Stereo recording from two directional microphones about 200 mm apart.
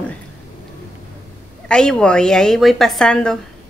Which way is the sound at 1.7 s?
5° left (ahead or behind).